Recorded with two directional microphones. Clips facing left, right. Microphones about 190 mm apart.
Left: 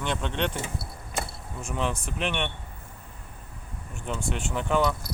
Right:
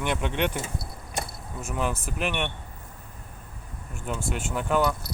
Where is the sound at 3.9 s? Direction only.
5° right (ahead or behind).